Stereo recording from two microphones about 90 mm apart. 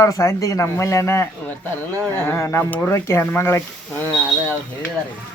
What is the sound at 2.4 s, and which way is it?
A man's voice, 30° left (ahead or behind).